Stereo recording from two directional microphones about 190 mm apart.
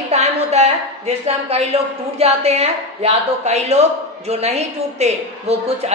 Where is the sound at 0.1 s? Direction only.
35° right (ahead or behind).